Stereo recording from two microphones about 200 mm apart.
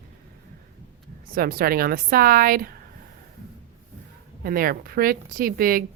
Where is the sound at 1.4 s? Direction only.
45° right (ahead or behind).